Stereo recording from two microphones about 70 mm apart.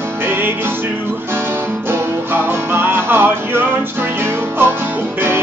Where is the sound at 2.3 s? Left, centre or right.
Right.